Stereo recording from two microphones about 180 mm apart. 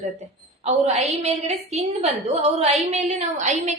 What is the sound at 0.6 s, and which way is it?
A woman's voice, 35° right (ahead or behind).